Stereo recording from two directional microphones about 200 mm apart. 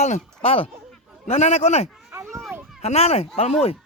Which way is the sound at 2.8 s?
30° left (ahead or behind).